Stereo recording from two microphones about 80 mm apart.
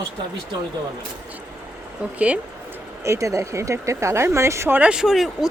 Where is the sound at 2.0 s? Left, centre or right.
Centre.